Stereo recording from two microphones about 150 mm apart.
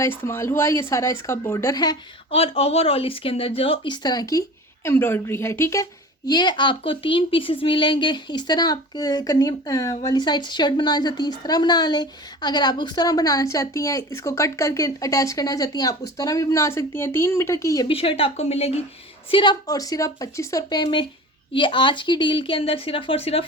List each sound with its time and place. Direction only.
0.0 s speech: 15° left (ahead or behind)
2.3 s speech: 40° left (ahead or behind); by 17.8 s 20° left (ahead or behind)
17.8 s speech: 35° left (ahead or behind)
19.3 s speech: 30° left (ahead or behind)